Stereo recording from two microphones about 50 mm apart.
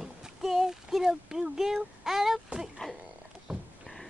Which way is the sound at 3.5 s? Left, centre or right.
Centre.